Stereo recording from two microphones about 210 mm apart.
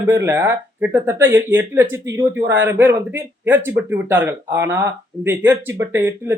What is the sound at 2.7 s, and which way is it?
A man's voice, 10° right (ahead or behind).